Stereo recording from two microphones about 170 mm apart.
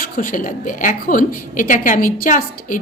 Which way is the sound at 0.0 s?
55° left (ahead or behind).